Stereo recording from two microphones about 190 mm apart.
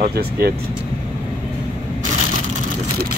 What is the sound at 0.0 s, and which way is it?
Speech, 55° right (ahead or behind).